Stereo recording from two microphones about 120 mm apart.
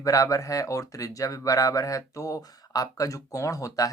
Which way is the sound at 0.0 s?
30° left (ahead or behind).